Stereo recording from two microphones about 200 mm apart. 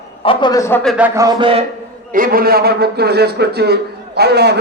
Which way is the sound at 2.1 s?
45° right (ahead or behind).